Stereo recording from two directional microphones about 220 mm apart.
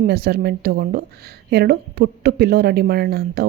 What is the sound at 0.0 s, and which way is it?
A woman's voice, 45° right (ahead or behind).